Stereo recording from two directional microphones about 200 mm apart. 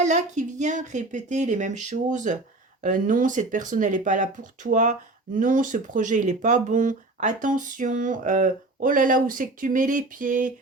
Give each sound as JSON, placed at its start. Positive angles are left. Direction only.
{"t": 0.0, "sound": "speech", "side_deg": -35}